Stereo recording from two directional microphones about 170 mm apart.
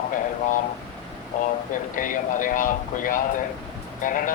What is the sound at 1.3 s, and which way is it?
Speech, 50° left (ahead or behind).